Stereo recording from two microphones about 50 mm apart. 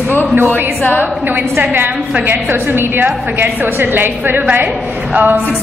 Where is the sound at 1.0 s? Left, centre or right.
Right.